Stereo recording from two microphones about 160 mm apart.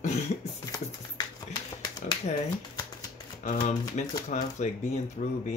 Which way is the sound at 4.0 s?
45° left (ahead or behind).